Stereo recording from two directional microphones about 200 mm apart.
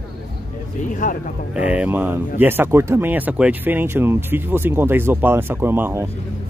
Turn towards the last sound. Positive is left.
turn(degrees=-10)  # may be behind; listen again after turning